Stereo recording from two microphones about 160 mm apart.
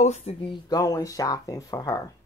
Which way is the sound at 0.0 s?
45° left (ahead or behind).